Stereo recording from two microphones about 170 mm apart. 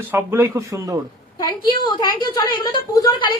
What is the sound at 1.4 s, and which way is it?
A woman's voice, 25° left (ahead or behind).